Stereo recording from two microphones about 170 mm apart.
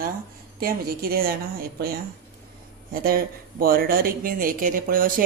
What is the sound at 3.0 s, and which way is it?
Speech, 60° right (ahead or behind).